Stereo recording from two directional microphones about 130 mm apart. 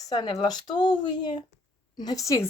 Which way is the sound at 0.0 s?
30° left (ahead or behind).